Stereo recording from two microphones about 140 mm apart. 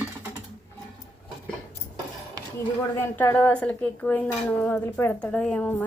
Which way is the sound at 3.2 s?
15° left (ahead or behind).